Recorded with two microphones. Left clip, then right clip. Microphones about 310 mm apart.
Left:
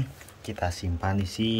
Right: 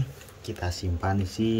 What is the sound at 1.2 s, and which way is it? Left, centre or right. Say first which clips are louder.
Speech: right 1 dB; left.